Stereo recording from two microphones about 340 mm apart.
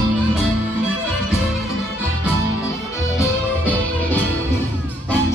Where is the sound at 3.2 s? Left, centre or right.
Centre.